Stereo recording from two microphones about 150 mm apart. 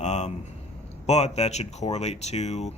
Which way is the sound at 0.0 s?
50° left (ahead or behind).